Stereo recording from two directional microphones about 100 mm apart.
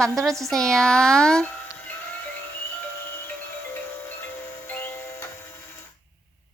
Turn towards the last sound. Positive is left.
turn(degrees=20)  # may be behind; listen again after turning